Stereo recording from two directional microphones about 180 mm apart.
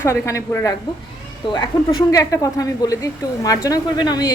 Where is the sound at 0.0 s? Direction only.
15° left (ahead or behind).